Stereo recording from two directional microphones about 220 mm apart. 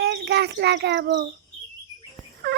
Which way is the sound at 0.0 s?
50° right (ahead or behind).